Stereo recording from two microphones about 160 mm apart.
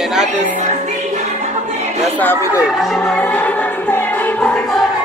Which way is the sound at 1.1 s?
45° right (ahead or behind).